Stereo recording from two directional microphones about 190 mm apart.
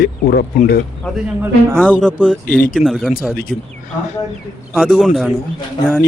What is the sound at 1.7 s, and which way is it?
Speech, 5° left (ahead or behind).